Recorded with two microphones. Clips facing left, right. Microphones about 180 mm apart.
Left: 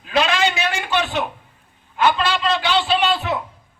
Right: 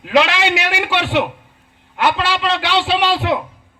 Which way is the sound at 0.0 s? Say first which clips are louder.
Right 4 dB; 80° right.